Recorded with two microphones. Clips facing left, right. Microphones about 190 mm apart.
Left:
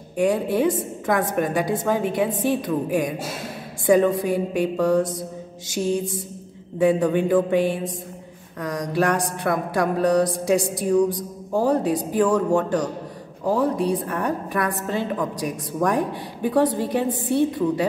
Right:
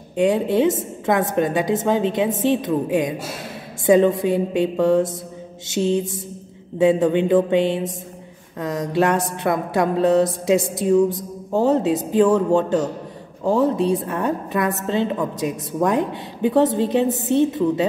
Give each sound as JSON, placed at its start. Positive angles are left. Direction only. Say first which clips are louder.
{"t": 0.1, "sound": "a woman's voice", "louder": "right 3 dB", "side_deg": -20}